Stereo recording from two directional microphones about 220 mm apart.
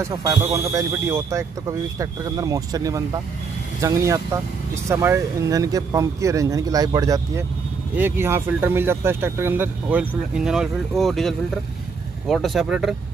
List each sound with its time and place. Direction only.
0.0 s speech: 15° right (ahead or behind)